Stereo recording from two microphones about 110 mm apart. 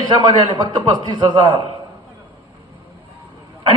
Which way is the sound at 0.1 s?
45° right (ahead or behind).